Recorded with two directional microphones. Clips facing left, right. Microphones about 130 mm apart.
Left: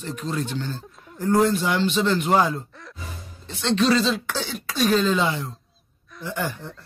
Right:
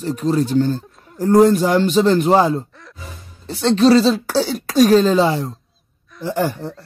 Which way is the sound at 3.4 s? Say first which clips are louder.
Right 7 dB; 35° right (ahead or behind).